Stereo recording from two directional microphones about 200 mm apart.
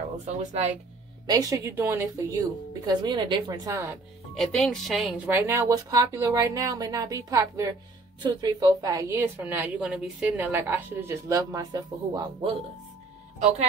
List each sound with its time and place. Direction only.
0.5 s speech: 35° right (ahead or behind)
1.2 s a woman's voice: 20° right (ahead or behind)
4.4 s a woman's voice: centre (ahead or behind); by 12.4 s 20° right (ahead or behind)